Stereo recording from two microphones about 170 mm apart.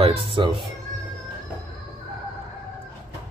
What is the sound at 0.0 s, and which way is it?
Speech, 30° right (ahead or behind).